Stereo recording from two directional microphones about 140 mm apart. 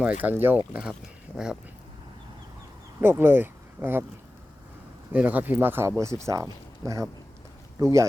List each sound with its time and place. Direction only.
0.0 s speech: 10° right (ahead or behind)
3.0 s speech: 15° right (ahead or behind)
5.1 s speech: 10° right (ahead or behind)